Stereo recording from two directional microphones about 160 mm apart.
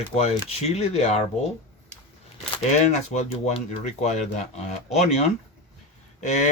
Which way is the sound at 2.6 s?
45° left (ahead or behind).